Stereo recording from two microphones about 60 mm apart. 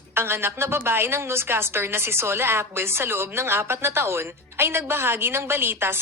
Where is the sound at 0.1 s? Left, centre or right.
Right.